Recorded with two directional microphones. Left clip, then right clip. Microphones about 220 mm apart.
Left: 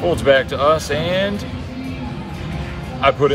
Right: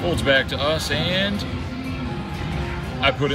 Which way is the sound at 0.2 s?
5° right (ahead or behind).